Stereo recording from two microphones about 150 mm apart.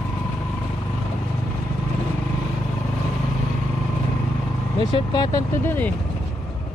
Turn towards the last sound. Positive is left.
turn(degrees=10)  # may be behind; listen again after turning